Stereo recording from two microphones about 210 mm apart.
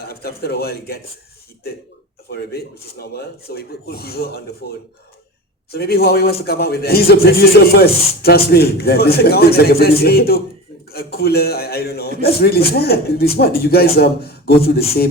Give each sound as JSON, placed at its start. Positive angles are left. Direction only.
{"t": 0.1, "sound": "a man's voice", "side_deg": 45}
{"t": 2.3, "sound": "a man's voice", "side_deg": 50}
{"t": 5.7, "sound": "a man's voice", "side_deg": 50}